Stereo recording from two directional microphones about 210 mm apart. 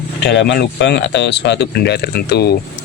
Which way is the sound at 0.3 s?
55° left (ahead or behind).